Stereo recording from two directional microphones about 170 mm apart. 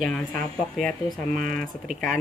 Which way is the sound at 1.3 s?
50° right (ahead or behind).